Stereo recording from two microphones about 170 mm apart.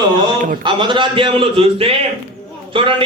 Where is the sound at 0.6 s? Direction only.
30° right (ahead or behind).